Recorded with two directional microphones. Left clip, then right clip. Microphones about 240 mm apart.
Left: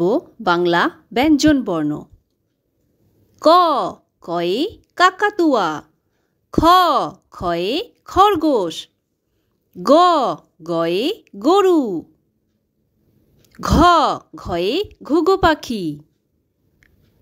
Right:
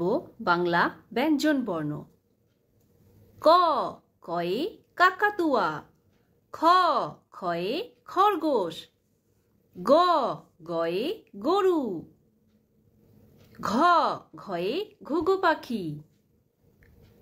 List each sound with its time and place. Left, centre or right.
0.0 s speech: left
3.3 s a woman's voice: left
13.5 s speech: left